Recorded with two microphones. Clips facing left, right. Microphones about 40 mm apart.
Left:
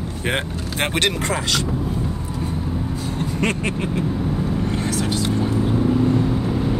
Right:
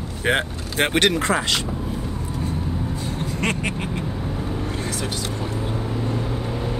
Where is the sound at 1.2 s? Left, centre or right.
Centre.